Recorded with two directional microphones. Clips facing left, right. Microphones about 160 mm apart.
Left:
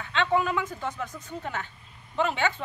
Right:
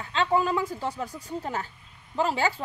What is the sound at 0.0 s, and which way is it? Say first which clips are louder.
A woman's voice: right 1 dB; 35° right (ahead or behind).